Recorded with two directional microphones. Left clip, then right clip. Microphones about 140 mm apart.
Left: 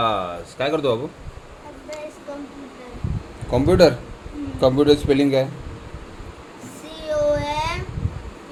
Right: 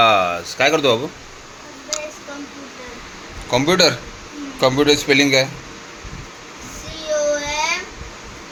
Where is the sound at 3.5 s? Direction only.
35° left (ahead or behind).